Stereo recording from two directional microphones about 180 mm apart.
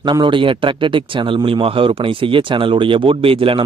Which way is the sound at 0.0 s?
25° right (ahead or behind).